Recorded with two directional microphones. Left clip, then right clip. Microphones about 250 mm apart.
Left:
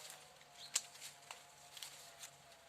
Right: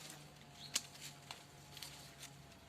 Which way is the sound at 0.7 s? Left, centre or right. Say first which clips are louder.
Right 1 dB; centre.